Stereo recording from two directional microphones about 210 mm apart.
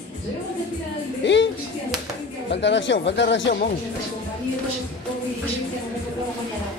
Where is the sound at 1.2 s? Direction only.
60° left (ahead or behind).